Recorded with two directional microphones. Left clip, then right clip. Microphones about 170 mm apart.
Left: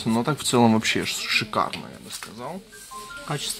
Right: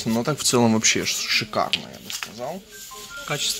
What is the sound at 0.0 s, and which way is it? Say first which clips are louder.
Speech: right 1 dB; centre (ahead or behind).